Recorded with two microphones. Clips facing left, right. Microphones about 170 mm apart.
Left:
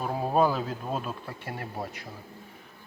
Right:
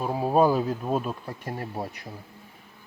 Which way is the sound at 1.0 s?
35° right (ahead or behind).